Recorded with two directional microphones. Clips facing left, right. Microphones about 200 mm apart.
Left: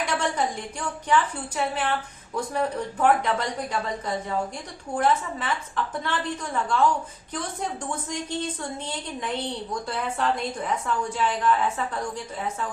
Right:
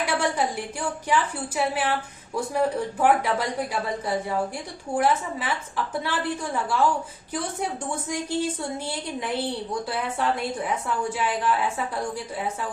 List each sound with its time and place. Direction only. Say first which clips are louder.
0.0 s a woman's voice: right 1 dB; 10° right (ahead or behind)